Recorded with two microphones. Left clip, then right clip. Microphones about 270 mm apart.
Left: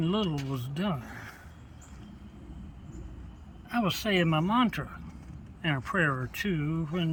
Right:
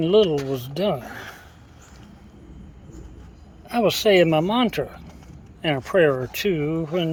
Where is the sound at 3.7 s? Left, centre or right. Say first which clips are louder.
Right 11 dB; centre.